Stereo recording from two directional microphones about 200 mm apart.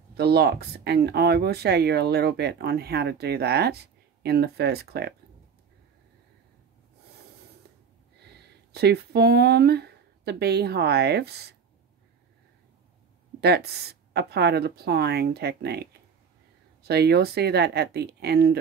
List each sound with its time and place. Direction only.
0.2 s speech: 55° right (ahead or behind)
8.7 s speech: 55° right (ahead or behind)
13.4 s speech: 55° right (ahead or behind)